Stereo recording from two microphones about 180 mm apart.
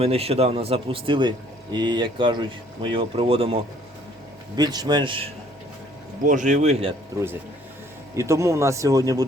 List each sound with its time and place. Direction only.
0.0 s speech: 35° right (ahead or behind)
6.2 s speech: 45° right (ahead or behind)
8.1 s speech: 15° right (ahead or behind)